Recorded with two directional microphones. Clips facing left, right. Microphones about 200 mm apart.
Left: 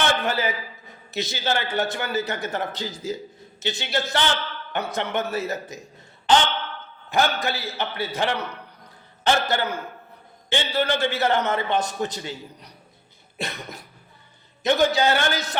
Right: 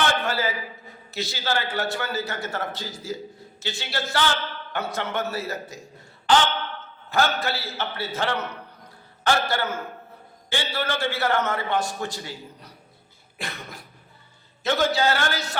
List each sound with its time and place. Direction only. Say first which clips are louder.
0.3 s a man's voice: left 1 dB; 20° left (ahead or behind)